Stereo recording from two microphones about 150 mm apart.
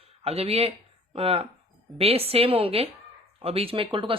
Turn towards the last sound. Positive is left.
turn(degrees=-35)  # may be behind; listen again after turning